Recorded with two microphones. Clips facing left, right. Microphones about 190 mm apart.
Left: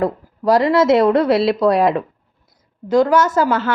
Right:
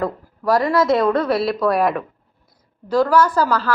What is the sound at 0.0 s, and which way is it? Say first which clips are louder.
A woman's voice: left 4 dB; 25° left (ahead or behind).